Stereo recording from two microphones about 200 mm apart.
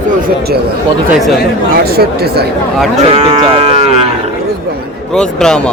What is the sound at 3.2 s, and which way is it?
Livestock, 25° right (ahead or behind).